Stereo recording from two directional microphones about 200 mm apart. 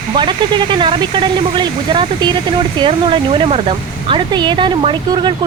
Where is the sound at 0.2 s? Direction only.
25° right (ahead or behind).